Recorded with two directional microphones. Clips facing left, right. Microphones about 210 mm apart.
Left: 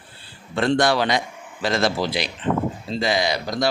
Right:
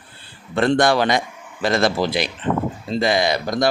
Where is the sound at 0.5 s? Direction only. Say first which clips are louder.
Right 3 dB; 55° right (ahead or behind).